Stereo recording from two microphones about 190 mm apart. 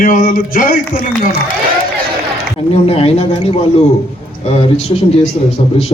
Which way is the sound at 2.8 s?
30° left (ahead or behind).